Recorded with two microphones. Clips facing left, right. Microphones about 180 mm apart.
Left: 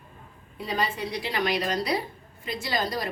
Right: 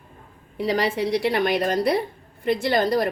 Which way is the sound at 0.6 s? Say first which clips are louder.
Right 7 dB; 80° right.